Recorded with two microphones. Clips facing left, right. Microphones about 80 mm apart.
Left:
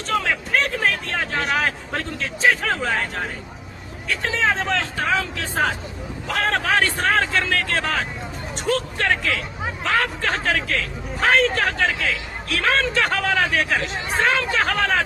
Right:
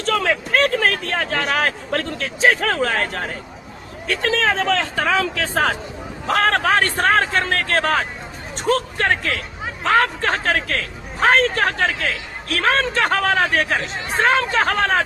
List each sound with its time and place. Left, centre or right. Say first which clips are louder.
0.0 s speech: right 3 dB; right
6.2 s a man's voice: right 5 dB; right
11.9 s speech: right 1 dB; right
12.5 s speech: right 2 dB; right